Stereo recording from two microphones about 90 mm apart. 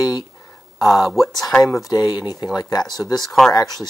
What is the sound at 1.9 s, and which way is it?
Speech, 45° left (ahead or behind).